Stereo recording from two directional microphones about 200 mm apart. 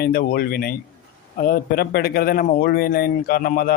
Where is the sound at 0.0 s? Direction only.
50° left (ahead or behind).